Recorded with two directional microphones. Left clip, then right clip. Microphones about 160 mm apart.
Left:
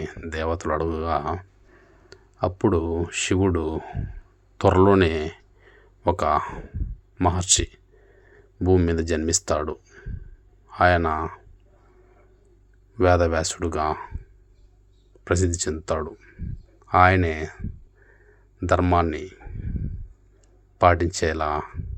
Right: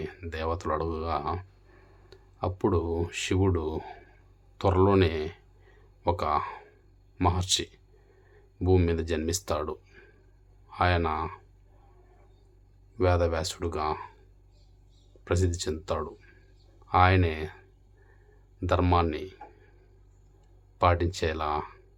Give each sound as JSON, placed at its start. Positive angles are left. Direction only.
{"t": 0.0, "sound": "speech", "side_deg": 25}
{"t": 2.0, "sound": "speech", "side_deg": 30}
{"t": 4.5, "sound": "speech", "side_deg": 35}
{"t": 13.0, "sound": "speech", "side_deg": 30}
{"t": 15.2, "sound": "speech", "side_deg": 30}
{"t": 18.6, "sound": "speech", "side_deg": 25}
{"t": 20.7, "sound": "speech", "side_deg": 30}